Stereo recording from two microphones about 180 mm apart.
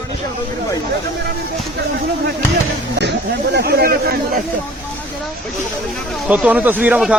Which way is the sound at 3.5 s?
55° right (ahead or behind).